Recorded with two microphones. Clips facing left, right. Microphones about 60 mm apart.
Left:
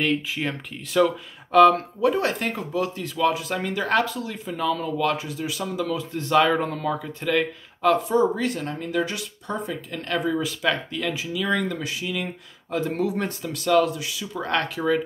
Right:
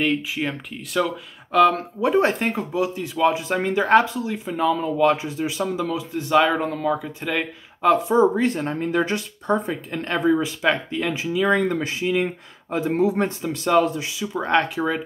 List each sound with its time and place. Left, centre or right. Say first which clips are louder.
0.0 s speech: right 2 dB; centre
2.0 s speech: right 3 dB; right
5.9 s speech: right 1 dB; centre